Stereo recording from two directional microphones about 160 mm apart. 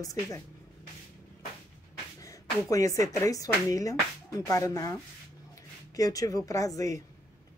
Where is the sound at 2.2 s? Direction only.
20° left (ahead or behind).